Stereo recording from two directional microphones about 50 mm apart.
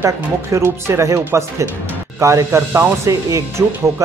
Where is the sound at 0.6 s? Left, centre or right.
Right.